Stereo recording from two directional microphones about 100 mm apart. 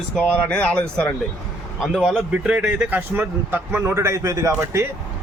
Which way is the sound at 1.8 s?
Centre (ahead or behind).